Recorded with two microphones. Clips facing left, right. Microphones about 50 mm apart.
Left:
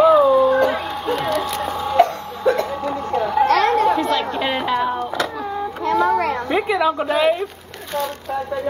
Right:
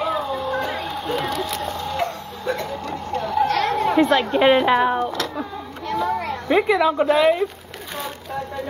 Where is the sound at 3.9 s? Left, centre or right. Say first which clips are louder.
Right 2 dB; right.